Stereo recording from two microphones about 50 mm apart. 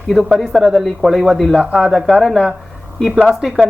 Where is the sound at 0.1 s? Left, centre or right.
Centre.